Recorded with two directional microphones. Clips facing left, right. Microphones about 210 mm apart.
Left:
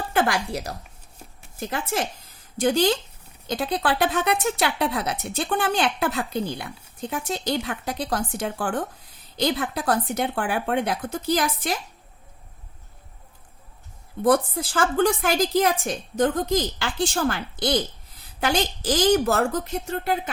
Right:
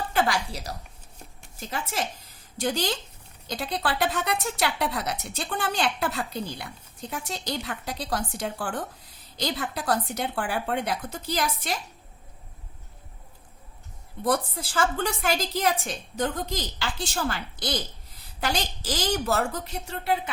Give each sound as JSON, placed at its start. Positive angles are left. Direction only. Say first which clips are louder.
{"t": 0.1, "sound": "a woman's voice", "louder": "left 4 dB", "side_deg": 50}
{"t": 14.3, "sound": "a woman's voice", "louder": "left 6 dB", "side_deg": 50}